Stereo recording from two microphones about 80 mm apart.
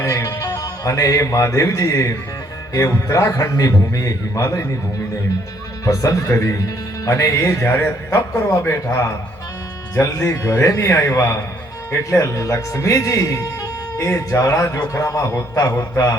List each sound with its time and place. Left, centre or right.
0.0 s a man's voice: left
5.8 s a man's voice: left